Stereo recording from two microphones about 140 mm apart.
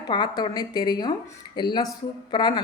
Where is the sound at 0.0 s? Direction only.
30° left (ahead or behind).